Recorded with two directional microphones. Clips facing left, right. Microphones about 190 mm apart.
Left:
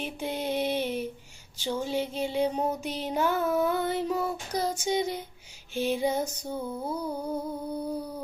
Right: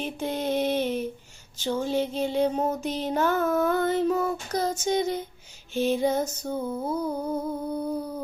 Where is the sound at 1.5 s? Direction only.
10° left (ahead or behind).